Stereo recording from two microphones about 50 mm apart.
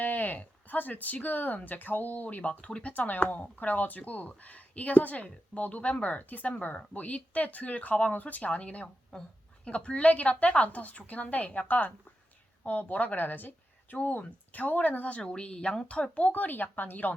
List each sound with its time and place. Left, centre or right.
0.0 s a woman's voice: left
3.0 s a woman's voice: left